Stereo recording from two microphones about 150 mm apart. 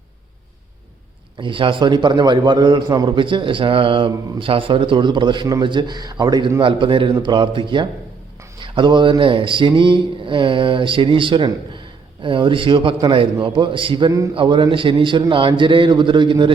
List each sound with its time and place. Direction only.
1.4 s a man's voice: 35° right (ahead or behind)